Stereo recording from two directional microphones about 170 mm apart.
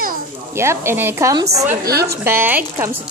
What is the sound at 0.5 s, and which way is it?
Speech, 15° right (ahead or behind).